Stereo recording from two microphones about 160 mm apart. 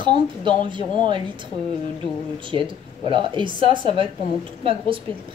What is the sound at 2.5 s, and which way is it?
Speech, 30° right (ahead or behind).